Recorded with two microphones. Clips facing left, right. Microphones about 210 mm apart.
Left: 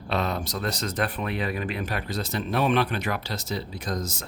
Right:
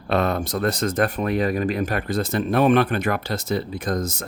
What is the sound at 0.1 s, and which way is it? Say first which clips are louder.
Speech: right 6 dB; 55° right (ahead or behind).